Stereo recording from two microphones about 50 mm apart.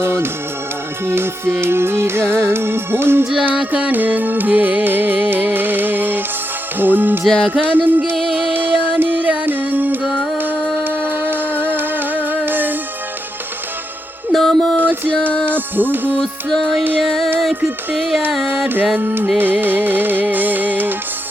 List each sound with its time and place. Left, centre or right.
0.0 s music: right
3.4 s music: right
7.3 s music: centre
7.6 s music: right
14.3 s a sound: centre
14.8 s music: right
16.2 s music: centre
18.9 s music: right